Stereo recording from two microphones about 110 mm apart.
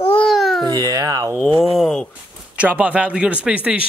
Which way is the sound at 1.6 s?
Centre (ahead or behind).